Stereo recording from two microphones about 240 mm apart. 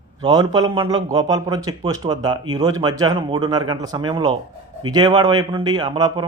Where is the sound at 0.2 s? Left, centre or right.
Centre.